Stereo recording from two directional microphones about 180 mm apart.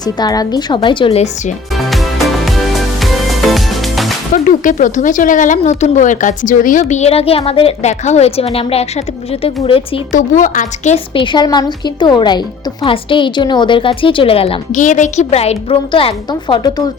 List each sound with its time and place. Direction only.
0.0 s a woman's voice: 20° left (ahead or behind); by 1.5 s 35° left (ahead or behind)
1.8 s music: centre (ahead or behind)
4.4 s speech: 45° left (ahead or behind); by 10.0 s 30° left (ahead or behind)
10.1 s a woman's voice: 45° left (ahead or behind); by 16.8 s 25° left (ahead or behind)